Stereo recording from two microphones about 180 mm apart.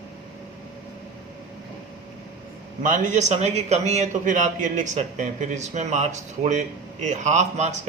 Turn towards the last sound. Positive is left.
turn(degrees=-40)  # may be behind; listen again after turning